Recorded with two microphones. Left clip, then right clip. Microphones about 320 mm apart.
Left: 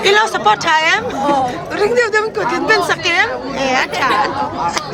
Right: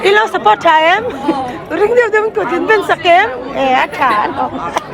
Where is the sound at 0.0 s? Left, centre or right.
Centre.